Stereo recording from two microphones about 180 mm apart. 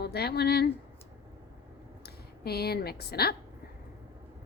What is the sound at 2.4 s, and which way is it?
Speech, 60° left (ahead or behind).